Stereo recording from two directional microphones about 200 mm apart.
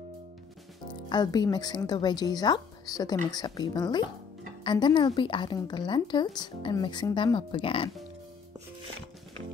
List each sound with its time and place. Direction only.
0.8 s a woman's voice: 20° left (ahead or behind)